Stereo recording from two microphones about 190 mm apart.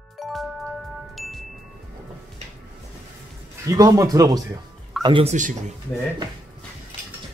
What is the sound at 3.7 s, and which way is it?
Speech, 15° right (ahead or behind).